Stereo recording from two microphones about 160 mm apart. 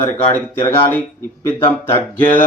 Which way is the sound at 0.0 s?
15° left (ahead or behind).